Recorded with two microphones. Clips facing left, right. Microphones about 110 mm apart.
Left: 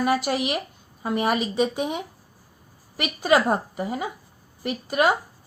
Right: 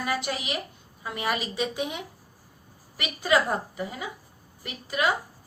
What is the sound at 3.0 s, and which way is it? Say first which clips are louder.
A woman's voice: left 4 dB; 55° left (ahead or behind).